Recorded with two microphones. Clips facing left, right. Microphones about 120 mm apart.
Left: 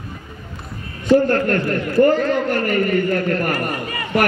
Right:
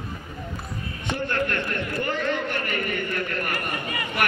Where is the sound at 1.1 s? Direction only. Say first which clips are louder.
Left 12 dB; 40° left (ahead or behind).